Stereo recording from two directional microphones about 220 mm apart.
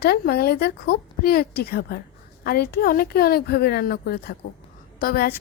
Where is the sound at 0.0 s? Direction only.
45° left (ahead or behind).